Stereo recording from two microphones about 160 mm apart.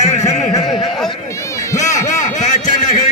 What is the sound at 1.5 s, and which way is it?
Run, 20° left (ahead or behind).